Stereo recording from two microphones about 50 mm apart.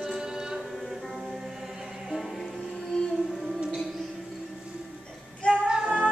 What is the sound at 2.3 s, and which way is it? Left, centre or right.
Music, centre.